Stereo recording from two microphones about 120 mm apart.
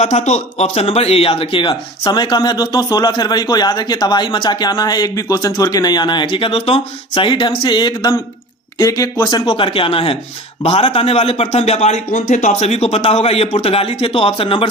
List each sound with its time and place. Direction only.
0.0 s speech: 75° left (ahead or behind); by 9.5 s 30° left (ahead or behind)
9.5 s a man's voice: 50° left (ahead or behind)